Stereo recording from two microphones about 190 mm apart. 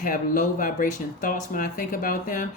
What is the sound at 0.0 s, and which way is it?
Speech, 45° left (ahead or behind).